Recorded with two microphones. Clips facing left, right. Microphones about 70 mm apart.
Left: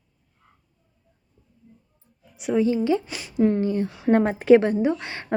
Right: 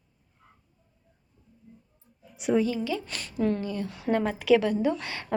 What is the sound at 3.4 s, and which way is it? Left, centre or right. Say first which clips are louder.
A woman's voice: left 7 dB; left.